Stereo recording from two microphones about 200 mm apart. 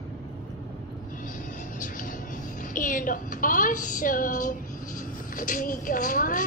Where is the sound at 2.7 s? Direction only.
40° left (ahead or behind).